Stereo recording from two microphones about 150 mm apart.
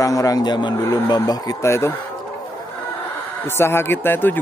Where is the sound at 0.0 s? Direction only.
20° left (ahead or behind).